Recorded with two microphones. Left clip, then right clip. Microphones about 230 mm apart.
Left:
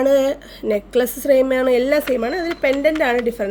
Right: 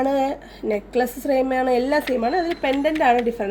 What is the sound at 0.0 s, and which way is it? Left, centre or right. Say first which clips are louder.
A woman's voice: left 5 dB; left.